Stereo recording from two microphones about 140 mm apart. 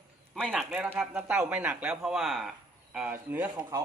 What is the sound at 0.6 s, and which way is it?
Speech, 10° right (ahead or behind).